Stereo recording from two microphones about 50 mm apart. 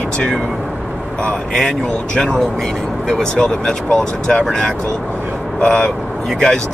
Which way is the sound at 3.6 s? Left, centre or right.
Centre.